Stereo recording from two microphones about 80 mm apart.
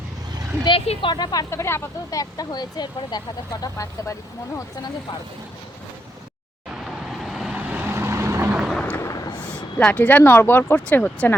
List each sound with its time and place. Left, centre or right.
0.6 s speech: left
1.5 s speech: left
2.0 s speech: left
3.6 s speech: left
6.8 s vehicle: centre
7.5 s vehicle: right
8.5 s a sound: centre
9.3 s a sound: centre
9.7 s speech: centre